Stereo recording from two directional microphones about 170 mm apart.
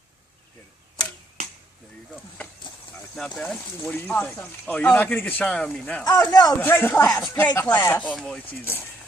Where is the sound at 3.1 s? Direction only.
5° left (ahead or behind).